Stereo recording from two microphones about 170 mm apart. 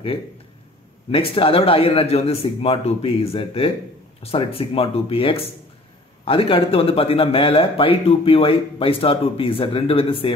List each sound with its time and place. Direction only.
1.1 s speech: 35° left (ahead or behind)